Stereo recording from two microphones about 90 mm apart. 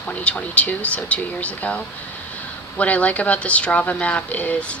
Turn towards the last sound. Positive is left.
turn(degrees=15)  # may be behind; listen again after turning